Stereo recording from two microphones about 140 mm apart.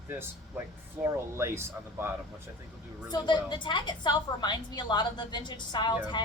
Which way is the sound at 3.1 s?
35° left (ahead or behind).